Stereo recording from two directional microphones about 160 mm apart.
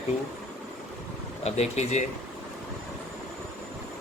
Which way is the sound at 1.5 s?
45° left (ahead or behind).